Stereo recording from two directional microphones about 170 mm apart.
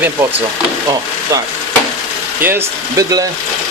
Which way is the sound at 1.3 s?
20° right (ahead or behind).